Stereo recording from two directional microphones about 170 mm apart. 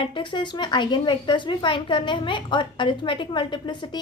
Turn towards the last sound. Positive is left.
turn(degrees=25)  # may be behind; listen again after turning